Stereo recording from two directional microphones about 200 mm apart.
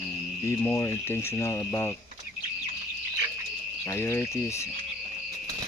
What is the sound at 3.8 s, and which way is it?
Speech, 15° left (ahead or behind).